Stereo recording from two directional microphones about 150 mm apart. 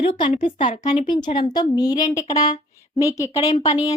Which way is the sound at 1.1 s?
30° left (ahead or behind).